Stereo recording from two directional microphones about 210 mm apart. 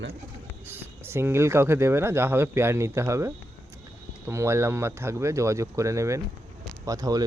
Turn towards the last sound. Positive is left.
turn(degrees=-15)  # may be behind; listen again after turning